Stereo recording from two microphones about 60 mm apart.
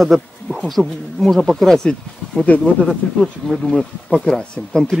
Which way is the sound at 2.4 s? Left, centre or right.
Left.